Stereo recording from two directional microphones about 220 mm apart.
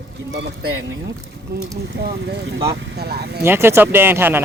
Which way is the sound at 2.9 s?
45° right (ahead or behind).